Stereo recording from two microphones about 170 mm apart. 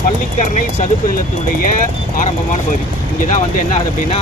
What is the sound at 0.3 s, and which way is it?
Speech, 45° left (ahead or behind).